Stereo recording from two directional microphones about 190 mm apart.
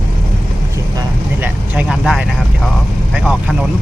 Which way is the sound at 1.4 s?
5° right (ahead or behind).